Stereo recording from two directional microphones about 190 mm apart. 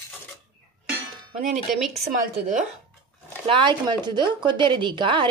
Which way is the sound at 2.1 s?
40° right (ahead or behind).